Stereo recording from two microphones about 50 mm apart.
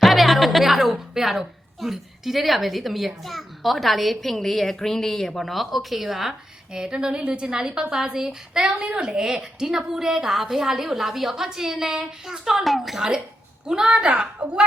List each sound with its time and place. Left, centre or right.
0.0 s a woman's voice: centre
6.7 s a woman's voice: centre
13.7 s a woman's voice: centre